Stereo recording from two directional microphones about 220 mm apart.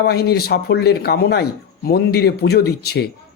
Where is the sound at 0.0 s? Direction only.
45° left (ahead or behind).